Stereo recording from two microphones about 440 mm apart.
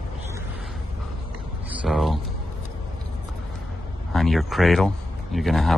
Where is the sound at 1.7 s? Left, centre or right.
Centre.